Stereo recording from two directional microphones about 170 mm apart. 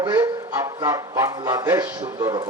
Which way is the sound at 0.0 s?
20° right (ahead or behind).